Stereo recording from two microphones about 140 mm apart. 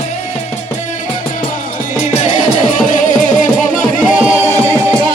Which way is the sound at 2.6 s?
65° left (ahead or behind).